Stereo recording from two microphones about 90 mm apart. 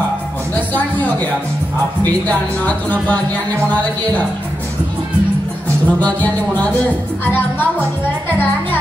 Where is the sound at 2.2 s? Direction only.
20° left (ahead or behind).